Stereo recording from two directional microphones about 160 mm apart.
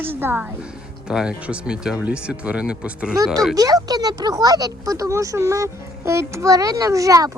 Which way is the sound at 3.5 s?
20° right (ahead or behind).